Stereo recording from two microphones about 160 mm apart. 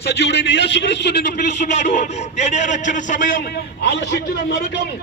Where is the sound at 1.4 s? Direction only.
50° left (ahead or behind).